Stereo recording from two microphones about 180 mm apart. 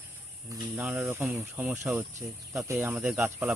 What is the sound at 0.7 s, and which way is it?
Speech, centre (ahead or behind).